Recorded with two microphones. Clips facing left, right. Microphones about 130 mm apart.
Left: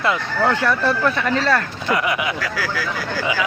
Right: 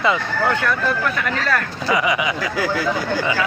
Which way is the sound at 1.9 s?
Centre (ahead or behind).